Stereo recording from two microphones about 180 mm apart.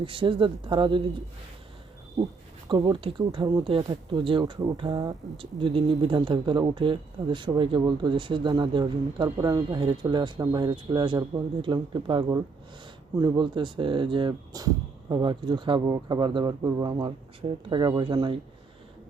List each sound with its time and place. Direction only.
0.0 s speech: 30° right (ahead or behind)
2.6 s speech: 25° right (ahead or behind)